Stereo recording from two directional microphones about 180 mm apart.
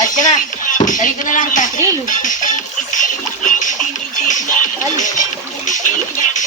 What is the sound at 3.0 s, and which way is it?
Music, 45° left (ahead or behind).